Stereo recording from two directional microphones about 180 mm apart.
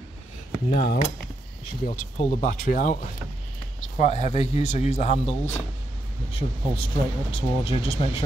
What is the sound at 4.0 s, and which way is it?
Speech, 35° left (ahead or behind).